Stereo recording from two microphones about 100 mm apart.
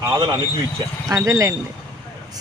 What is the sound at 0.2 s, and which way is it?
Speech, 55° right (ahead or behind).